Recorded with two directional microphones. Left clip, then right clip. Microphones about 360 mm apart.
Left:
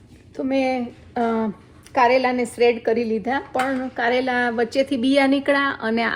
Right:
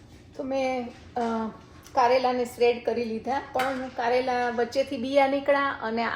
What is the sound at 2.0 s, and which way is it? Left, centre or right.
A woman's voice, left.